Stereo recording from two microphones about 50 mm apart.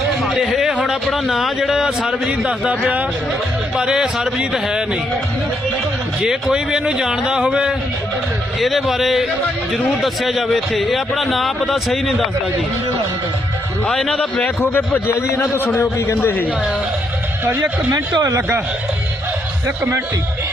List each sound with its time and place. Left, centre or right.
0.2 s a man's voice: centre; by 3.1 s right
3.8 s speech: centre
6.2 s speech: centre
8.5 s a man's voice: centre
13.9 s a man's voice: centre
14.4 s a man's voice: left